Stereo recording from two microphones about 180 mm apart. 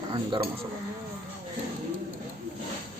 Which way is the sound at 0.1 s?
25° right (ahead or behind).